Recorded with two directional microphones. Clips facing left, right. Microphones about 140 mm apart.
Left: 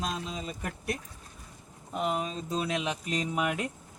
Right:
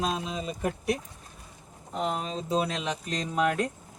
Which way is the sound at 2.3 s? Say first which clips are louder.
Right 4 dB; 90° right.